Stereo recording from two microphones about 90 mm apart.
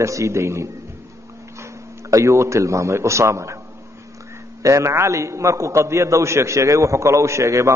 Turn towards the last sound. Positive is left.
turn(degrees=-35)  # may be behind; listen again after turning